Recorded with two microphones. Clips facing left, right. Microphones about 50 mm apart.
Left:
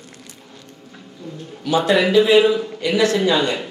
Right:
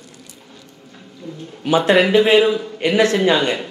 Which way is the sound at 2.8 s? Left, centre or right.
Right.